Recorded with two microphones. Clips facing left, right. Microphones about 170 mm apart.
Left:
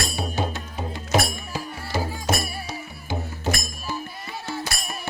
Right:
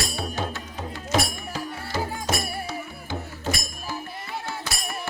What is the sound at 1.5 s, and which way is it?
Music, 10° left (ahead or behind).